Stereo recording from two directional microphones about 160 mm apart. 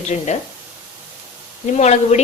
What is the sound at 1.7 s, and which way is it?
Speech, 45° left (ahead or behind).